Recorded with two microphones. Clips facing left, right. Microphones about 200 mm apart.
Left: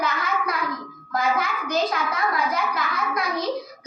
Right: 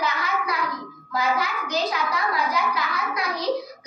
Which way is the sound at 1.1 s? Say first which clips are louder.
Left 1 dB; 50° left (ahead or behind).